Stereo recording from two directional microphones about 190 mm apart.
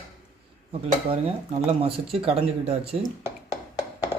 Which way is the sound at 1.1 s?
30° right (ahead or behind).